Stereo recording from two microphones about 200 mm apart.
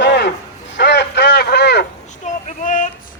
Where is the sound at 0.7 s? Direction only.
55° left (ahead or behind).